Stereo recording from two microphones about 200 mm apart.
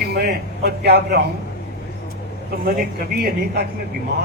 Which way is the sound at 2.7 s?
50° right (ahead or behind).